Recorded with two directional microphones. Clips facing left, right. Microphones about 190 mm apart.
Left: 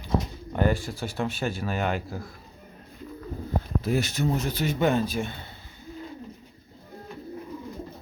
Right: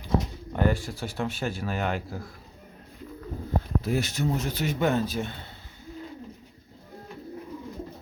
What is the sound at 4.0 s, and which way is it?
Speech, 65° left (ahead or behind).